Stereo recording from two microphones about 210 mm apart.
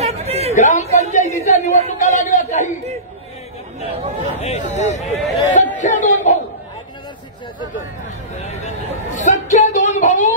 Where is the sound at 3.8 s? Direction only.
30° right (ahead or behind).